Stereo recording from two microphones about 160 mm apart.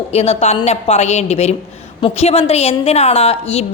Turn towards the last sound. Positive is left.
turn(degrees=40)  # may be behind; listen again after turning